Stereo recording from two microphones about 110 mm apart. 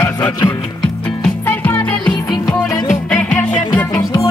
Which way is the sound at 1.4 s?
15° left (ahead or behind).